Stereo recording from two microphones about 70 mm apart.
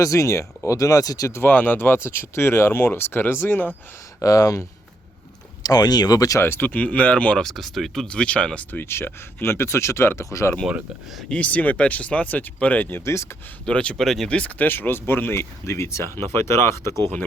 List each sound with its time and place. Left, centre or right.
0.0 s speech: left
1.3 s speech: left
4.2 s speech: left
5.6 s speech: left
6.4 s speech: left
6.7 s speech: left
7.3 s speech: centre
8.8 s speech: left
11.3 s speech: centre
13.7 s speech: centre
14.0 s speech: centre
14.3 s speech: centre
14.7 s speech: left